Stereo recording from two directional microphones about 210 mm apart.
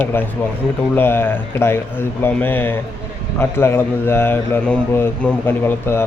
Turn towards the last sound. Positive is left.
turn(degrees=10)  # may be behind; listen again after turning